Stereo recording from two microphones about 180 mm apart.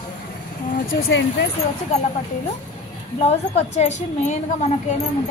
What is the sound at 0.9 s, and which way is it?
Speech, 70° left (ahead or behind).